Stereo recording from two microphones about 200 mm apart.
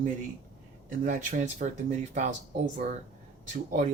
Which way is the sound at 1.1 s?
40° right (ahead or behind).